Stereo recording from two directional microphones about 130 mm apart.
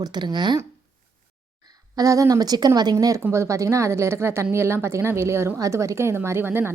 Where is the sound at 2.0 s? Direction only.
25° right (ahead or behind).